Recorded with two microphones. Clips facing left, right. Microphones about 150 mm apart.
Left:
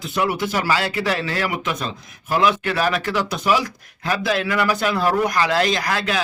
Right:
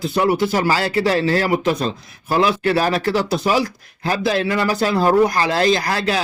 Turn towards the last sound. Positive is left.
turn(degrees=-35)  # may be behind; listen again after turning